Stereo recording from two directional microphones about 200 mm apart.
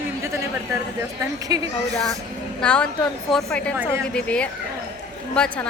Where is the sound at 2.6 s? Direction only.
5° left (ahead or behind).